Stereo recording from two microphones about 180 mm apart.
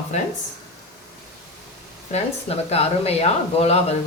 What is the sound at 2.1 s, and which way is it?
Speech, 35° left (ahead or behind).